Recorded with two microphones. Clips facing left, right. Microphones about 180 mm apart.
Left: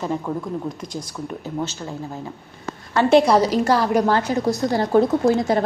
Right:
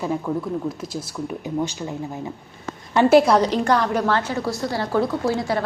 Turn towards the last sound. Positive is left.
turn(degrees=20)  # may be behind; listen again after turning